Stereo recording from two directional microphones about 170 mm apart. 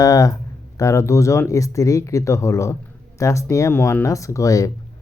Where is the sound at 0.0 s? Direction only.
20° left (ahead or behind).